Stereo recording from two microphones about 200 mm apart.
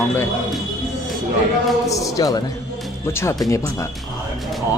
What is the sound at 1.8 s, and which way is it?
Speech, 15° left (ahead or behind).